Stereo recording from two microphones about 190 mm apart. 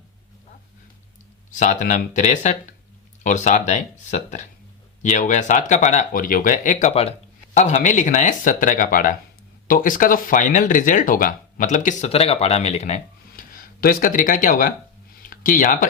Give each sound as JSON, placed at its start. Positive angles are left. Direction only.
{"t": 1.5, "sound": "speech", "side_deg": 40}